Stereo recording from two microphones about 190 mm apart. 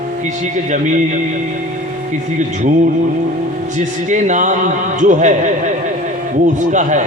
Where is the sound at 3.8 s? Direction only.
40° right (ahead or behind).